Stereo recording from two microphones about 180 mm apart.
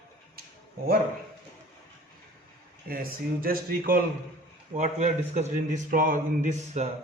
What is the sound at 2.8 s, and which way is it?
Speech, 55° right (ahead or behind).